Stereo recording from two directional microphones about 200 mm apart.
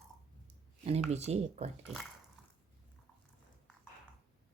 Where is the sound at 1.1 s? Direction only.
30° right (ahead or behind).